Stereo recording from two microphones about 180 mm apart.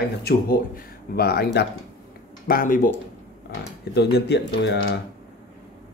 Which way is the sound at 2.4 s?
50° left (ahead or behind).